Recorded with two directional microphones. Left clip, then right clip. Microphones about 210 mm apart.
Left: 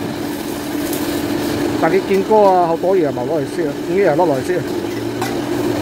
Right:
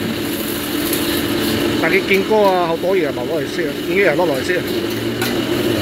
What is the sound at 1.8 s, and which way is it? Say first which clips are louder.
Speech: left 1 dB; 20° left (ahead or behind).